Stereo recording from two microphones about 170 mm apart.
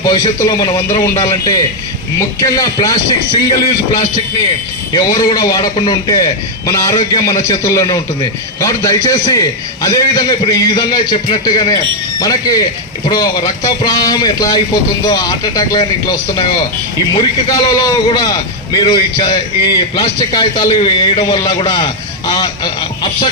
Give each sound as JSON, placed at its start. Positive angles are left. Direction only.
{"t": 0.0, "sound": "a man's voice", "side_deg": 25}
{"t": 4.9, "sound": "a man's voice", "side_deg": 25}